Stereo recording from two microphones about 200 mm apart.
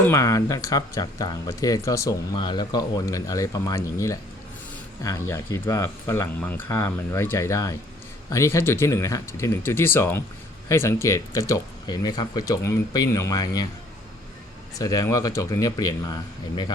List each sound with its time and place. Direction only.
0.0 s speech: 15° left (ahead or behind)
14.8 s speech: 15° left (ahead or behind)